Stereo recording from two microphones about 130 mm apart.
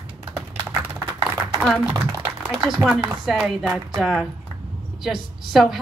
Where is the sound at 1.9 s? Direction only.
25° right (ahead or behind).